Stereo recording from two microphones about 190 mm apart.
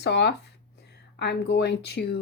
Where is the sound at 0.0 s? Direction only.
65° left (ahead or behind).